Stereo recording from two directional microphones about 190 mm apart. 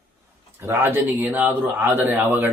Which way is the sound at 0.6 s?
10° right (ahead or behind).